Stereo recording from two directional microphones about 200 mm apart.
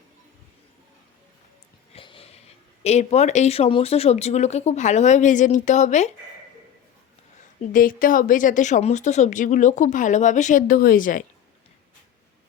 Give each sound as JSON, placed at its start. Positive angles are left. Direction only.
{"t": 1.9, "sound": "a sound", "side_deg": 25}
{"t": 2.8, "sound": "a woman's voice", "side_deg": 35}
{"t": 7.6, "sound": "a woman's voice", "side_deg": 45}